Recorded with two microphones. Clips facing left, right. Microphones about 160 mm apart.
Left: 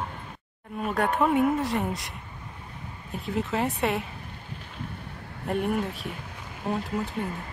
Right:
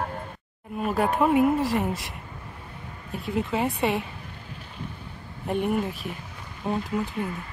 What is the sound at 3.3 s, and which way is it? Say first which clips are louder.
Speech: right 1 dB; centre (ahead or behind).